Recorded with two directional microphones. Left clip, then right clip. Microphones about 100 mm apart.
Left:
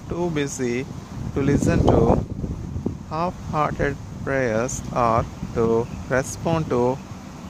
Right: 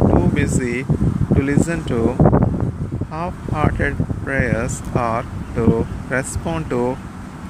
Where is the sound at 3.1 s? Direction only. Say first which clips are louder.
Left 1 dB; 45° left (ahead or behind).